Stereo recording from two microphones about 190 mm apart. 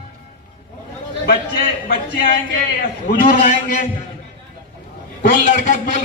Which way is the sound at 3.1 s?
50° left (ahead or behind).